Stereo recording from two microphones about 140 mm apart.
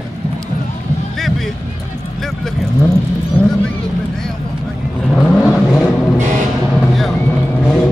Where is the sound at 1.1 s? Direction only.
Centre (ahead or behind).